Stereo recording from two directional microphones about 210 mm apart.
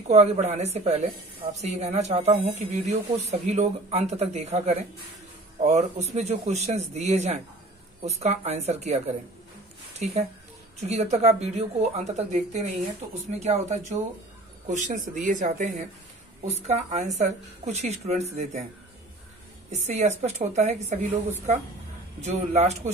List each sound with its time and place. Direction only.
0.1 s speech: 30° right (ahead or behind)
19.7 s speech: 30° right (ahead or behind)